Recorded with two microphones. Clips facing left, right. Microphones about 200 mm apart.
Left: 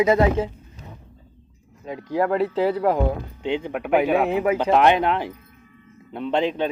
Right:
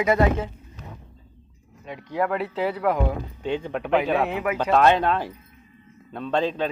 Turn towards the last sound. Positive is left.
turn(degrees=20)  # may be behind; listen again after turning